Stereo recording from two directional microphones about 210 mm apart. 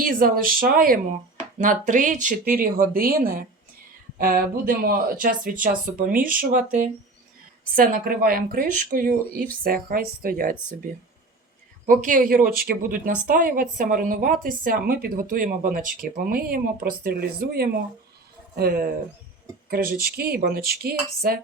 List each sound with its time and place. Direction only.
0.0 s a woman's voice: 40° right (ahead or behind)
11.9 s a woman's voice: 35° right (ahead or behind)